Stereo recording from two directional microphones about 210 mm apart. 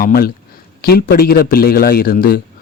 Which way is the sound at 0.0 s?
45° left (ahead or behind).